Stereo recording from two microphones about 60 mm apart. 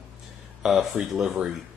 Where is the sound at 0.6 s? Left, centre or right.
Centre.